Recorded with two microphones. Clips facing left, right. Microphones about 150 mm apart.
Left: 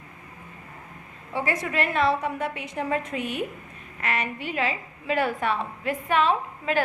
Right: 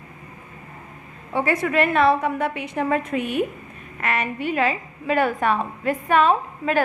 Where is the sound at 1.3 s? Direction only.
60° right (ahead or behind).